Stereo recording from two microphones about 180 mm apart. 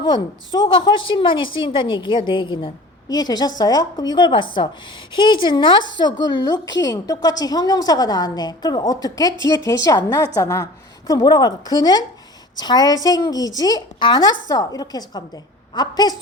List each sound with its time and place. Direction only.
0.0 s a woman's voice: 25° left (ahead or behind)